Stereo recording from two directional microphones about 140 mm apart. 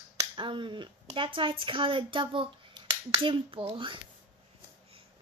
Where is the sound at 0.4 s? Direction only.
35° right (ahead or behind).